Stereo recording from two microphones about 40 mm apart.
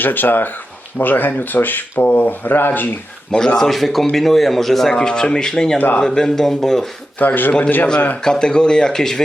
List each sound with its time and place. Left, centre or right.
0.0 s speech: left
3.3 s speech: centre
3.7 s speech: centre
4.9 s speech: centre
7.2 s speech: left
8.2 s speech: centre